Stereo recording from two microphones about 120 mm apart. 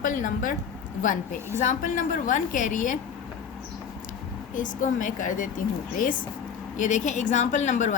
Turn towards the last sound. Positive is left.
turn(degrees=85)